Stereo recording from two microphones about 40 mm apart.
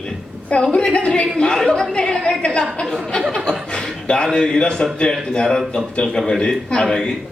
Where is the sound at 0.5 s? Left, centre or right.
Left.